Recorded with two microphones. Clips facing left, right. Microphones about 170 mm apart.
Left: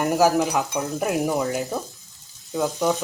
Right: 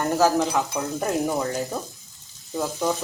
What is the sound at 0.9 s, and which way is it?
Sizzle, 5° left (ahead or behind).